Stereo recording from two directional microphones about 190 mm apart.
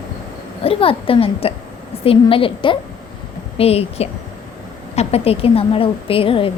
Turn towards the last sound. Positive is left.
turn(degrees=30)  # may be behind; listen again after turning